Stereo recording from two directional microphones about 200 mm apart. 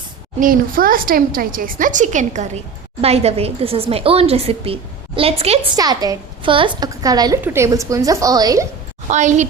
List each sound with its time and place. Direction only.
0.3 s a woman's voice: 45° right (ahead or behind)
5.7 s a woman's voice: 20° right (ahead or behind)
9.0 s a woman's voice: 35° right (ahead or behind)